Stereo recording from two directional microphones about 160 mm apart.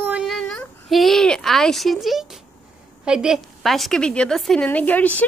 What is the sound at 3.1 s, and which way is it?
A woman's voice, 5° right (ahead or behind).